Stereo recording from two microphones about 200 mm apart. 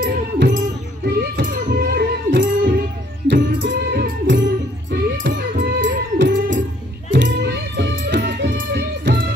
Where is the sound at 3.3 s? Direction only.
55° right (ahead or behind).